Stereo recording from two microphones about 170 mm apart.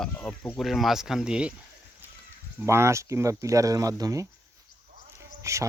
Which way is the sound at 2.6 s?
15° right (ahead or behind).